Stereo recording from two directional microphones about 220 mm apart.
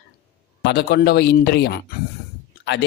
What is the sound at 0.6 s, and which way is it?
Speech, 50° left (ahead or behind).